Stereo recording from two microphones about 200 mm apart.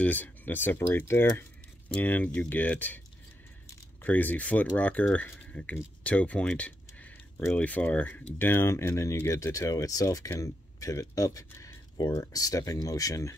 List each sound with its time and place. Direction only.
0.0 s speech: 10° left (ahead or behind)
4.0 s speech: 10° left (ahead or behind)